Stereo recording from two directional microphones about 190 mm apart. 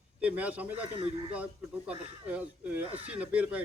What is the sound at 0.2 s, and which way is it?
Speech, 5° right (ahead or behind).